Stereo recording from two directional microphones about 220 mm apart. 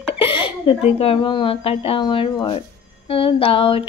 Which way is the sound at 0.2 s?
25° left (ahead or behind).